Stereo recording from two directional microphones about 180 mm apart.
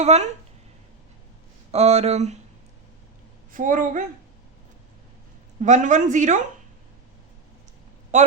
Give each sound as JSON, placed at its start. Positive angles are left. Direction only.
{"t": 0.0, "sound": "speech", "side_deg": -35}
{"t": 1.7, "sound": "speech", "side_deg": -35}
{"t": 3.5, "sound": "speech", "side_deg": -45}
{"t": 5.6, "sound": "speech", "side_deg": -45}
{"t": 8.1, "sound": "speech", "side_deg": -40}